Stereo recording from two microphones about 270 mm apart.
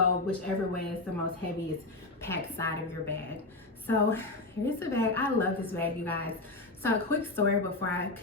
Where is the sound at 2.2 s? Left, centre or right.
Centre.